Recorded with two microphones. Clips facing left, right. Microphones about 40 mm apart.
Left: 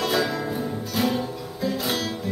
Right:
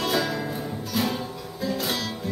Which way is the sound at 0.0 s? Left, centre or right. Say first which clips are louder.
Left 2 dB; centre.